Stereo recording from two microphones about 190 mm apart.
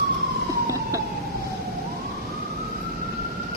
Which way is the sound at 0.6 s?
15° right (ahead or behind).